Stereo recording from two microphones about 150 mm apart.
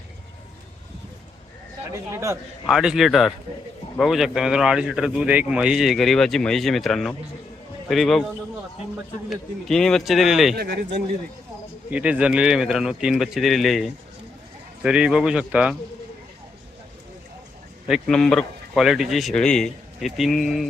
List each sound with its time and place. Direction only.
1.9 s speech: 20° right (ahead or behind)
2.6 s speech: 5° right (ahead or behind)
9.3 s speech: 5° left (ahead or behind)
10.5 s speech: 90° right
11.9 s speech: 10° right (ahead or behind)
14.8 s speech: 5° right (ahead or behind)
17.8 s speech: centre (ahead or behind)